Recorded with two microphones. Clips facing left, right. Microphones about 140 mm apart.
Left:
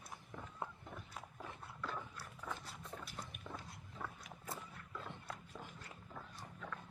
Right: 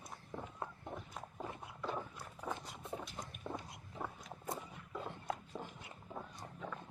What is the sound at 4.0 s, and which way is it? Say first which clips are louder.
Biting: right 4 dB; 15° right (ahead or behind).